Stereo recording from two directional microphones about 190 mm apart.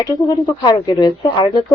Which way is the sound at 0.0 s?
20° left (ahead or behind).